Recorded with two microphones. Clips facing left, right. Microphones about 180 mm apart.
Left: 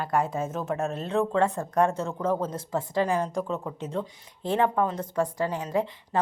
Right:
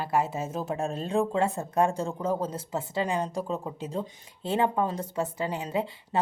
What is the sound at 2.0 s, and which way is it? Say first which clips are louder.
A man's voice: left 1 dB; 30° right (ahead or behind).